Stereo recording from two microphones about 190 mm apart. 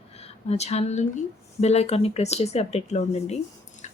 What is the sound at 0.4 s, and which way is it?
Speech, 35° left (ahead or behind).